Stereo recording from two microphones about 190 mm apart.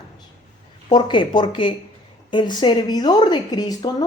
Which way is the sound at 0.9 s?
25° left (ahead or behind).